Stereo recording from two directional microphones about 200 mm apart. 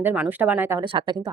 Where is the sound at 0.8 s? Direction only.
25° right (ahead or behind).